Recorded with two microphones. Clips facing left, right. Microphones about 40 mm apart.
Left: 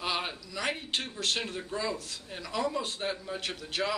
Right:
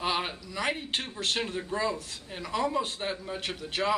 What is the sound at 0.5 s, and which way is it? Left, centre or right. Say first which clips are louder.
A man's voice: right 1 dB; centre.